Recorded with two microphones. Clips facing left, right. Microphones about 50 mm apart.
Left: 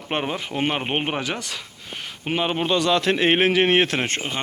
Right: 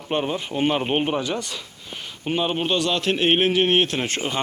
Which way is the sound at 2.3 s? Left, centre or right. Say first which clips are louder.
Even; left.